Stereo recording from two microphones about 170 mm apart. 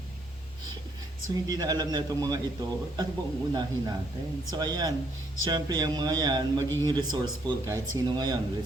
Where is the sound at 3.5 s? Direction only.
25° right (ahead or behind).